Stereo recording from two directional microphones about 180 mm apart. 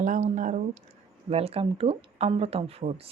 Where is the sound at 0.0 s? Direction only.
40° right (ahead or behind).